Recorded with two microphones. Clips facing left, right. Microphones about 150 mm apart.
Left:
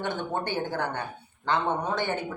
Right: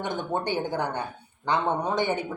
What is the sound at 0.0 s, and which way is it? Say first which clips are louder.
Speech: right 1 dB; 15° right (ahead or behind).